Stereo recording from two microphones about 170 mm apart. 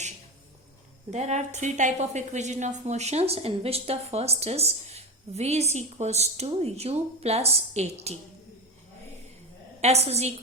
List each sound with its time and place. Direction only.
1.1 s a woman's voice: 45° right (ahead or behind)
9.8 s a woman's voice: 40° right (ahead or behind)